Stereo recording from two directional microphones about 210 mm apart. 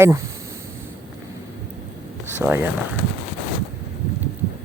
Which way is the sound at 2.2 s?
10° right (ahead or behind).